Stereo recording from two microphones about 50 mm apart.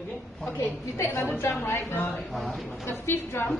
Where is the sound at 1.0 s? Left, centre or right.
Left.